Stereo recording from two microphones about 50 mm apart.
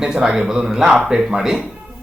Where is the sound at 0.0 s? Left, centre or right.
Centre.